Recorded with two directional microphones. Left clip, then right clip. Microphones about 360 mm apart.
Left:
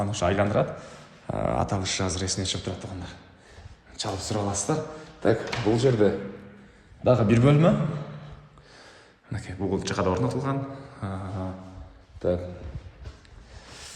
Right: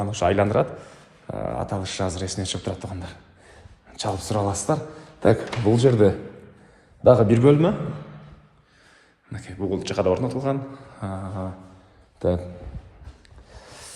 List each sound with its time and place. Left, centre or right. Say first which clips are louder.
0.0 s speech: right 4 dB; centre
1.3 s speech: left 1 dB; centre
9.3 s speech: right 2 dB; centre